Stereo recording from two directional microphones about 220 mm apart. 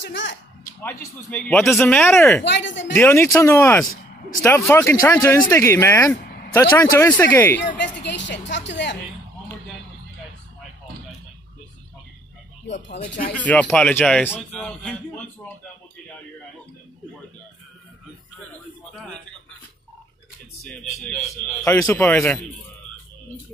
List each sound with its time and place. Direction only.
0.0 s speech: 55° left (ahead or behind)
0.8 s speech: 5° left (ahead or behind)
2.4 s speech: 55° left (ahead or behind)
2.9 s speech: 10° left (ahead or behind)
7.7 s a sound: 50° left (ahead or behind)
12.8 s speech: 30° left (ahead or behind)
13.4 s a man's voice: 5° left (ahead or behind)
21.6 s speech: 15° left (ahead or behind)